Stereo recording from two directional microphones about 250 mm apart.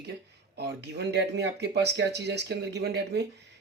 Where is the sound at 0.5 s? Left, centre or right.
Right.